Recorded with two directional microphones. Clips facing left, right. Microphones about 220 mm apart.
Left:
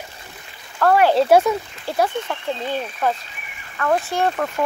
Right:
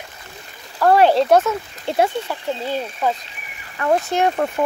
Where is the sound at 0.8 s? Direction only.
25° right (ahead or behind).